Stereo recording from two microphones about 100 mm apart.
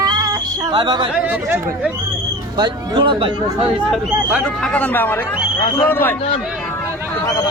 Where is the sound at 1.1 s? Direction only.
10° right (ahead or behind).